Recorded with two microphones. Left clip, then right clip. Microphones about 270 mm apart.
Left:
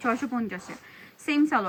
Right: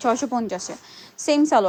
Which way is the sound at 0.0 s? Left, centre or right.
Right.